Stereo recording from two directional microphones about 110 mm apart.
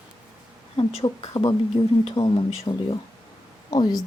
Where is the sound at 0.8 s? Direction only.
55° left (ahead or behind).